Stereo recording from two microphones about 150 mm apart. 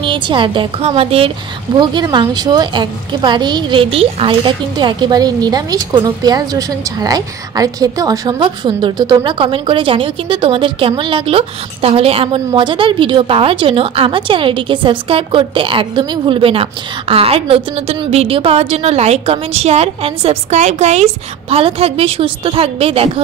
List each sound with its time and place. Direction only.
0.0 s a woman's voice: 30° right (ahead or behind)
1.8 s a woman's voice: 30° right (ahead or behind)